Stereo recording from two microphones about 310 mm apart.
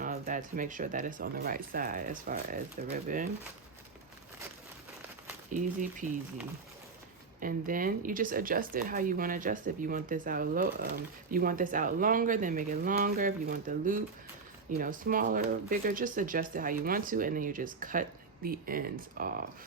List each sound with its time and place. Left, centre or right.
0.0 s speech: right
5.5 s speech: right
7.3 s speech: right